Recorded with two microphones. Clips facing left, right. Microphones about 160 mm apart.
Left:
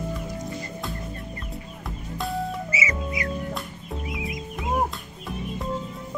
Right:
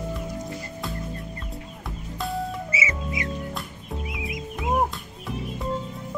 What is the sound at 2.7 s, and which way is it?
Music, 25° right (ahead or behind).